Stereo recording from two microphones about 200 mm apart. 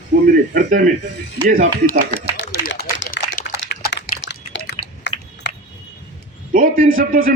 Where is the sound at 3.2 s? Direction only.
60° left (ahead or behind).